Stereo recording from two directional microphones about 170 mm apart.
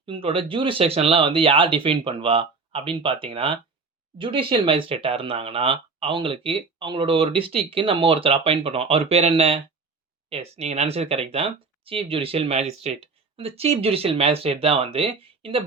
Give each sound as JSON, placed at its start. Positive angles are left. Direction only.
{"t": 0.0, "sound": "speech", "side_deg": -30}